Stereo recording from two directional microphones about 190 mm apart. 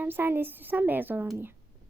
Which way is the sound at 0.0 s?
10° right (ahead or behind).